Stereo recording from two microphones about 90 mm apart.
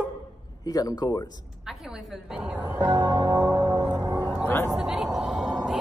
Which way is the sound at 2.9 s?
40° right (ahead or behind).